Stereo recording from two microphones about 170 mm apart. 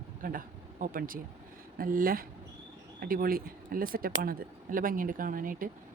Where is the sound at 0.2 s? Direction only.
55° right (ahead or behind).